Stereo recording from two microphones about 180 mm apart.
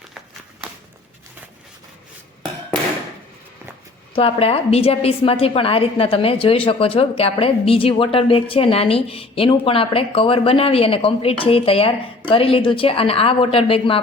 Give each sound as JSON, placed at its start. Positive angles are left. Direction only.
{"t": 4.1, "sound": "a woman's voice", "side_deg": 30}